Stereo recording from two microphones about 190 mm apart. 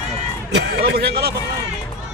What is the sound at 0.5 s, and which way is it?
Speech, 60° right (ahead or behind).